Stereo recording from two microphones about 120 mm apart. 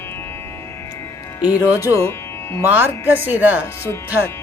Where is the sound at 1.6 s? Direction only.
15° right (ahead or behind).